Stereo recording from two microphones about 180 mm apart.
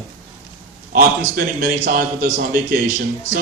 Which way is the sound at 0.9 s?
55° right (ahead or behind).